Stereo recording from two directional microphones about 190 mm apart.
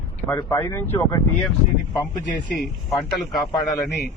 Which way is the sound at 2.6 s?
Centre (ahead or behind).